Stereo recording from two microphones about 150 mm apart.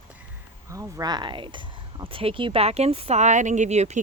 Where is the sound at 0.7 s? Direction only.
20° right (ahead or behind).